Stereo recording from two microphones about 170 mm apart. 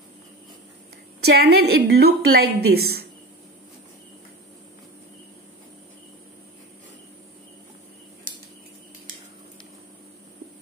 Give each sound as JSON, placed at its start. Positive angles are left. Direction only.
{"t": 1.2, "sound": "a woman's voice", "side_deg": -70}